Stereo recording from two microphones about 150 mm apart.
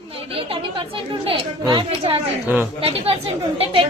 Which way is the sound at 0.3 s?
35° right (ahead or behind).